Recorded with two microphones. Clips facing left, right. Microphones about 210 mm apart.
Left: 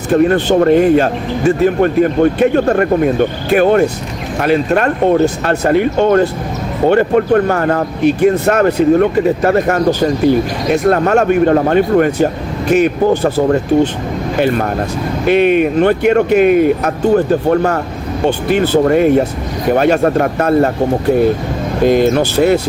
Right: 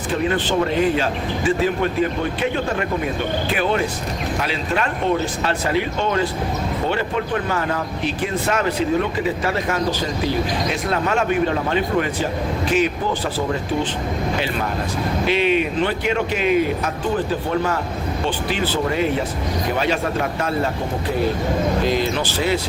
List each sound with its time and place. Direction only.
0.1 s speech: 60° left (ahead or behind)
21.8 s speech: 55° left (ahead or behind)